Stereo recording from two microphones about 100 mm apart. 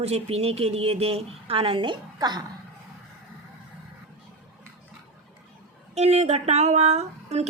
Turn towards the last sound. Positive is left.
turn(degrees=-90)